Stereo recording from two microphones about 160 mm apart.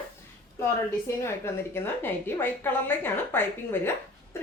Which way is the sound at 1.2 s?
15° left (ahead or behind).